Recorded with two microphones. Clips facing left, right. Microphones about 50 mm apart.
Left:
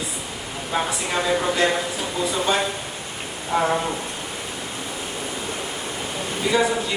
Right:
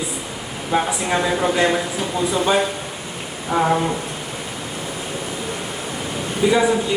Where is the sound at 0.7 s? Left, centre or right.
Centre.